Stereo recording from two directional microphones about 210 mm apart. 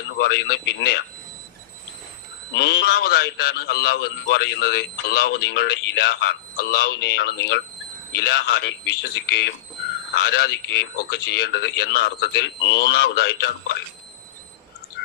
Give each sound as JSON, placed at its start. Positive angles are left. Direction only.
{"t": 0.2, "sound": "a man's voice", "side_deg": 50}
{"t": 2.6, "sound": "a man's voice", "side_deg": 50}